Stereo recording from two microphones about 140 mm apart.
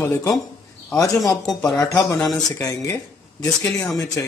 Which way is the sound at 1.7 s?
20° left (ahead or behind).